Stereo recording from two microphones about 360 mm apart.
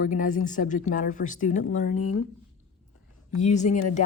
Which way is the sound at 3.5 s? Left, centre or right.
Centre.